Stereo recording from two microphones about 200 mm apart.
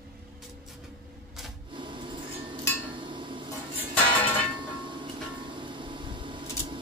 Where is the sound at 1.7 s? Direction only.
25° right (ahead or behind).